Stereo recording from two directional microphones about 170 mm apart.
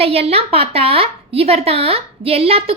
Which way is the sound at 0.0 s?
35° right (ahead or behind).